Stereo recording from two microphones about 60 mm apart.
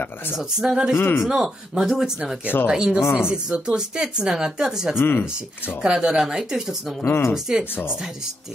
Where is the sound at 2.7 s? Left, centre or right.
Centre.